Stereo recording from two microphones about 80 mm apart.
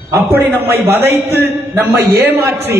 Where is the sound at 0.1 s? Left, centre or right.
Right.